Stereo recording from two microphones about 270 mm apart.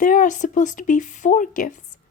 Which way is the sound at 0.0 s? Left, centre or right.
Left.